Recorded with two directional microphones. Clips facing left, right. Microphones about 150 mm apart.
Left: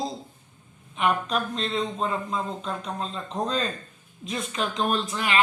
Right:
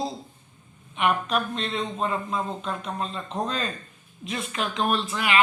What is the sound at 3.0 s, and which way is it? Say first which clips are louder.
Speech: even; 30° left (ahead or behind).